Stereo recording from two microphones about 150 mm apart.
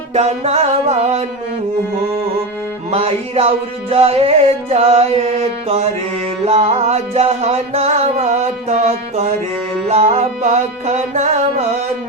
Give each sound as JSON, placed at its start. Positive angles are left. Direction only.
{"t": 0.1, "sound": "music", "side_deg": -45}
{"t": 2.9, "sound": "music", "side_deg": -45}
{"t": 6.4, "sound": "music", "side_deg": -45}